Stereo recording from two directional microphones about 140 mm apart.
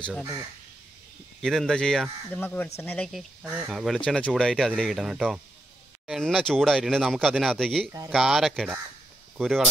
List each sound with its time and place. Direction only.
0.2 s speech: 20° right (ahead or behind)
1.4 s speech: centre (ahead or behind)
3.1 s speech: 5° right (ahead or behind)